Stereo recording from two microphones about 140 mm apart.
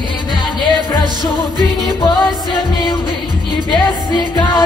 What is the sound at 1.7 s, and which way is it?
Music, centre (ahead or behind).